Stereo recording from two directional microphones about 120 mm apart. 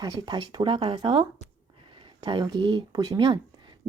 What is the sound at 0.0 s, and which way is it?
Speech, 40° right (ahead or behind).